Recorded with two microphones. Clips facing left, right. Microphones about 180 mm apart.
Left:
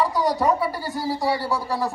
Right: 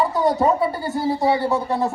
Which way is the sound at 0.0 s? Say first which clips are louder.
Right 3 dB; 25° right (ahead or behind).